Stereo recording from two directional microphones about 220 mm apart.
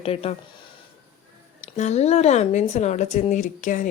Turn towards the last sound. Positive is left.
turn(degrees=35)  # may be behind; listen again after turning